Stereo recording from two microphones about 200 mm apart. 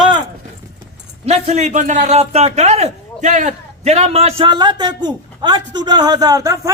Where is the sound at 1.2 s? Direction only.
30° right (ahead or behind).